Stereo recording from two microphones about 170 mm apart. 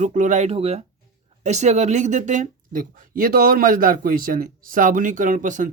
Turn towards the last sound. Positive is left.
turn(degrees=-50)  # may be behind; listen again after turning